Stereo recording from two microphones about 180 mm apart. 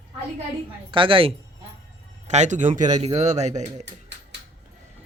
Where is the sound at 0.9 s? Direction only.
30° right (ahead or behind).